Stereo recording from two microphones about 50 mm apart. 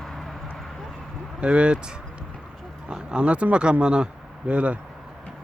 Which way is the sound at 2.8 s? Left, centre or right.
Right.